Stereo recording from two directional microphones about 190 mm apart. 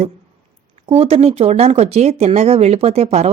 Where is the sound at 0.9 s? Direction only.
30° right (ahead or behind).